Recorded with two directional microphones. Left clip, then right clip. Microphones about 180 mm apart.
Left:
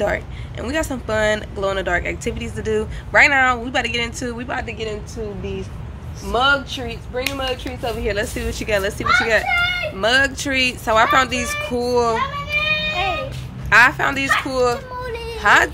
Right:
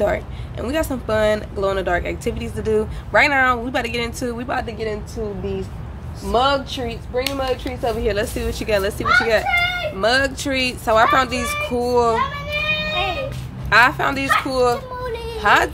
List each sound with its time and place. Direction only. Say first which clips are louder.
0.0 s a child's voice: right 1 dB; 10° right (ahead or behind)
12.9 s music: left 1 dB; 15° left (ahead or behind)
13.7 s a child's voice: left 1 dB; 5° right (ahead or behind)